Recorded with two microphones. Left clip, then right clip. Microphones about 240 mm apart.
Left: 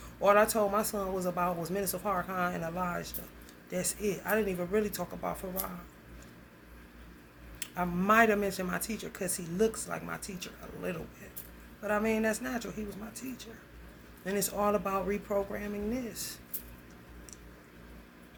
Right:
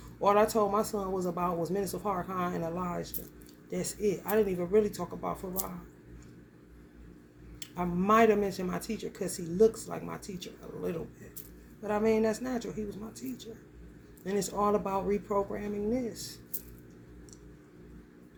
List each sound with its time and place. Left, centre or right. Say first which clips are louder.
0.2 s speech: even; centre
7.6 s speech: even; centre